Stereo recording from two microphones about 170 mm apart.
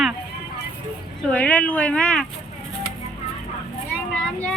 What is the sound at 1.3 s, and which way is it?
Speech, 10° left (ahead or behind).